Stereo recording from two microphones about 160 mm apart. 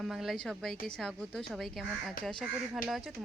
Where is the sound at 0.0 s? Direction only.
Centre (ahead or behind).